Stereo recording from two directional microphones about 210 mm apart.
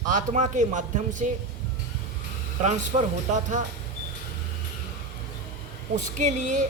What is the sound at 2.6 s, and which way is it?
Speech, 35° right (ahead or behind).